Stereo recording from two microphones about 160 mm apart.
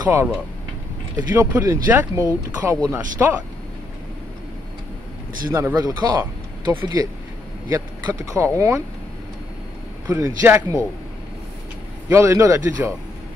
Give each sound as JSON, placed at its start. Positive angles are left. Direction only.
{"t": 0.0, "sound": "speech", "side_deg": -15}
{"t": 5.5, "sound": "speech", "side_deg": -20}
{"t": 10.0, "sound": "speech", "side_deg": -20}
{"t": 12.1, "sound": "speech", "side_deg": -20}